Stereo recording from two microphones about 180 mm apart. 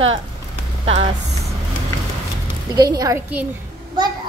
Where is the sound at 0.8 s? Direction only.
35° right (ahead or behind).